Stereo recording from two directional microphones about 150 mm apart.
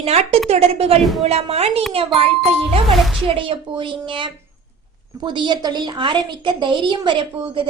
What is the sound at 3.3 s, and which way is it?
A woman's voice, 35° right (ahead or behind).